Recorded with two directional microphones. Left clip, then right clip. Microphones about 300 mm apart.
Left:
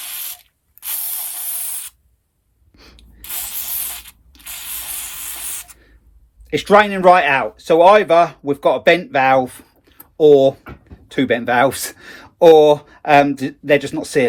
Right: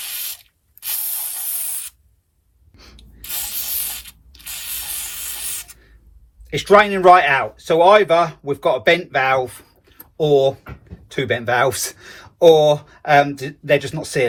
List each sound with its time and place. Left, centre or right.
0.0 s spray: centre
2.7 s a sound: left
3.2 s spray: centre
6.5 s speech: left